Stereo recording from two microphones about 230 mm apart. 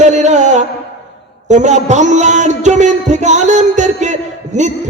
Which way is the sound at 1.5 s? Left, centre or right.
Right.